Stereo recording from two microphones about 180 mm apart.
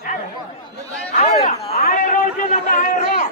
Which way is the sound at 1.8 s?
50° left (ahead or behind).